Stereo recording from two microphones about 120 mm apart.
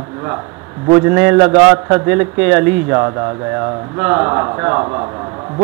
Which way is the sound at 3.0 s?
25° right (ahead or behind).